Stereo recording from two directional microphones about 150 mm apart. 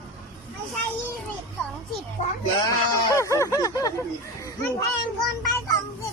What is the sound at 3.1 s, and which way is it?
Speech, 20° left (ahead or behind).